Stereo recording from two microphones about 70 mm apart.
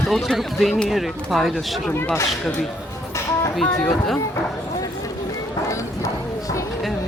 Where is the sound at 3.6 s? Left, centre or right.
Centre.